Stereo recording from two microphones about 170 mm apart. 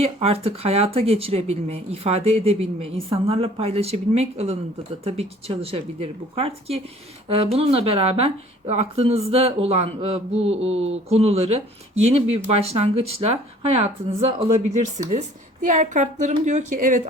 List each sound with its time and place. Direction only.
0.0 s a woman's voice: 35° right (ahead or behind)